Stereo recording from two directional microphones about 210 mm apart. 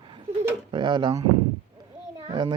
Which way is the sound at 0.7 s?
20° right (ahead or behind).